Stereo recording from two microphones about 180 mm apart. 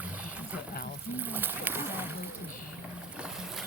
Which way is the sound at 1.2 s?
10° right (ahead or behind).